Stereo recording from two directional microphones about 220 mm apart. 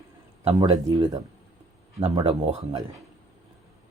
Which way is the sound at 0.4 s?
15° right (ahead or behind).